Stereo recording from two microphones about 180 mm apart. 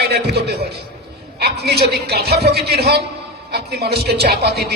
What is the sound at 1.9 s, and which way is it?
A man's voice, 60° right (ahead or behind).